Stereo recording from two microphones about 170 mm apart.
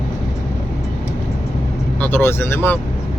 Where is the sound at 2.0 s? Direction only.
10° left (ahead or behind).